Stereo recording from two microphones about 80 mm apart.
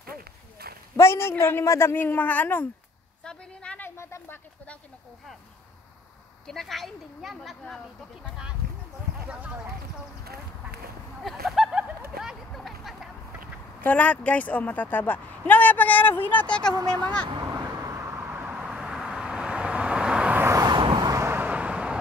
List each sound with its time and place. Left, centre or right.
0.9 s speech: left
3.3 s a sound: centre
3.8 s a sound: left
6.4 s speech: centre
9.3 s speech: centre
11.2 s a sound: centre
12.5 s vehicle: centre
13.7 s speech: centre
16.9 s speech: right
17.4 s vehicle: right; by 20.3 s centre
20.7 s vehicle: right
21.1 s vehicle: right; by 21.9 s centre